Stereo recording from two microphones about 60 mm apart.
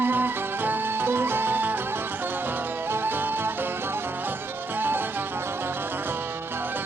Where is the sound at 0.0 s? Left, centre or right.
Right.